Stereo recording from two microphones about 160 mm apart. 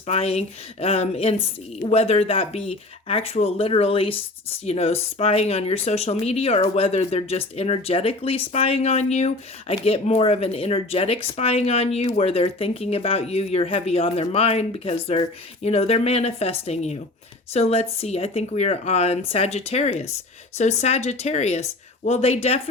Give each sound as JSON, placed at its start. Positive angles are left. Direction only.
{"t": 0.1, "sound": "a woman's voice", "side_deg": 40}